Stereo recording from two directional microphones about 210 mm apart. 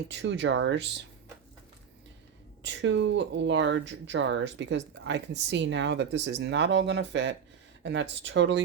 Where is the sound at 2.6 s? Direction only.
60° right (ahead or behind).